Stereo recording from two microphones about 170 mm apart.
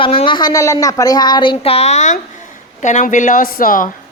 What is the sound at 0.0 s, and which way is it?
Speech, 30° left (ahead or behind).